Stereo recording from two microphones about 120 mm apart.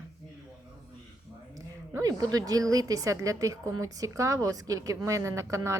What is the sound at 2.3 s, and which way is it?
Speech, 30° right (ahead or behind).